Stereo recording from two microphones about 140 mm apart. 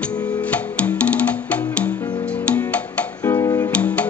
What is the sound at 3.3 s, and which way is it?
Music, 25° left (ahead or behind).